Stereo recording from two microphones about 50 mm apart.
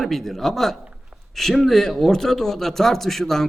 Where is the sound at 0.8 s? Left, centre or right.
Right.